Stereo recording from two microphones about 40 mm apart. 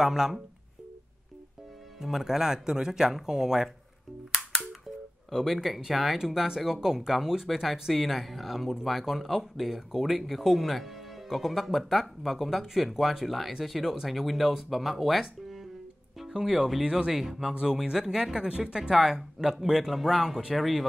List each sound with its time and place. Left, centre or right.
0.0 s speech: centre
2.0 s speech: centre
4.8 s music: centre
6.1 s speech: centre
16.3 s speech: centre
18.3 s speech: centre